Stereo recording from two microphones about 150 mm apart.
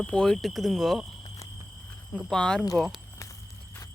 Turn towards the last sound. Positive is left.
turn(degrees=0)  # may be behind; listen again after turning